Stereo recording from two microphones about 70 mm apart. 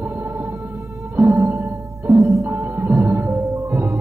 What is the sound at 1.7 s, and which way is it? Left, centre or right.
Music, right.